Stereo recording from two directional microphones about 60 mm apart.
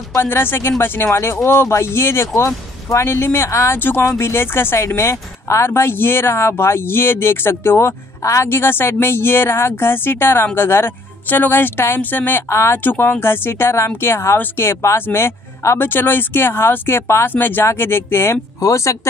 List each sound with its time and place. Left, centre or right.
0.2 s speech: left
8.2 s a woman's voice: left
8.5 s speech: left
12.4 s speech: left
12.7 s speech: left
18.6 s speech: left